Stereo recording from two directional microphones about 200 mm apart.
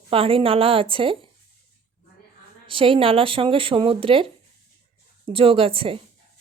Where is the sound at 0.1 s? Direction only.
25° right (ahead or behind).